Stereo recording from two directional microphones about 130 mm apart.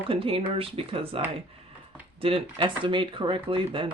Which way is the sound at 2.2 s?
45° right (ahead or behind).